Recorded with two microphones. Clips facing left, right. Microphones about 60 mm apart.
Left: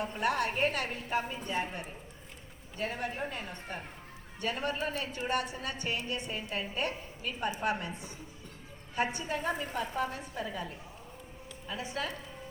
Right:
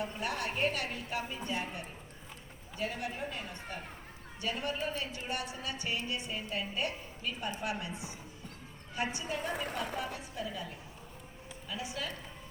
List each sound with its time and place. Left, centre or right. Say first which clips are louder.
0.0 s a woman's voice: left 5 dB; left
9.0 s a woman's voice: left 3 dB; left
11.7 s speech: left 3 dB; left